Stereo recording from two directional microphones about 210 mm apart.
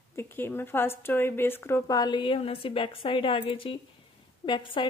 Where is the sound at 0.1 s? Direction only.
10° left (ahead or behind).